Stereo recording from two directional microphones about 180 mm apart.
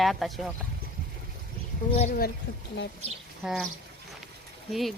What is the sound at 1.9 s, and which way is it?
Speech, 50° left (ahead or behind).